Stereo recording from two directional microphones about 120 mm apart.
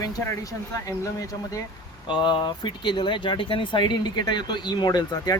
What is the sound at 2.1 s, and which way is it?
Speech, 40° left (ahead or behind).